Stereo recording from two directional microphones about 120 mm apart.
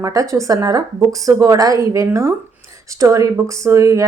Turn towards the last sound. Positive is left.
turn(degrees=-25)  # may be behind; listen again after turning